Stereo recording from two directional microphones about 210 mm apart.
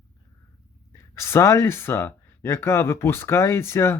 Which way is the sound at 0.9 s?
10° left (ahead or behind).